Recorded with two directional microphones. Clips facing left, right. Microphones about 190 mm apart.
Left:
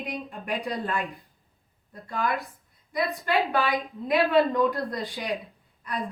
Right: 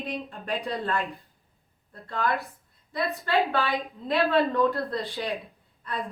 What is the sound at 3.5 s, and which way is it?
A woman's voice, 15° left (ahead or behind).